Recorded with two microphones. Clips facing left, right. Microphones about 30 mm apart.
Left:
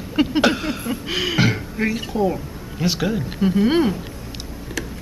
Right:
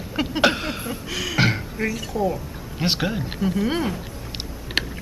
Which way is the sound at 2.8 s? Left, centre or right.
Right.